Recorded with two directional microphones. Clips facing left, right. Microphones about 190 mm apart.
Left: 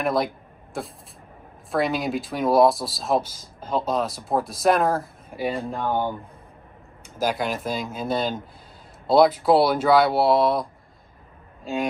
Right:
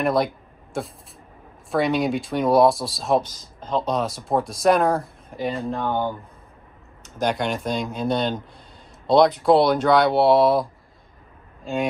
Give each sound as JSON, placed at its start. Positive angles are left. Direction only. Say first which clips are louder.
{"t": 0.0, "sound": "speech", "louder": "right 2 dB", "side_deg": 0}
{"t": 7.2, "sound": "speech", "louder": "right 1 dB", "side_deg": 5}